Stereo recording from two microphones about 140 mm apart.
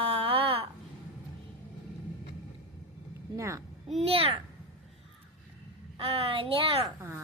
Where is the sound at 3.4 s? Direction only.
20° right (ahead or behind).